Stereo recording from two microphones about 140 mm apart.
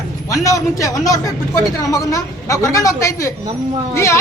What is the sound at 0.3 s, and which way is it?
A man's voice, 25° left (ahead or behind).